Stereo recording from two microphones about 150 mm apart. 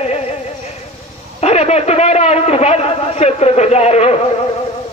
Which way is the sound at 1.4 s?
45° left (ahead or behind).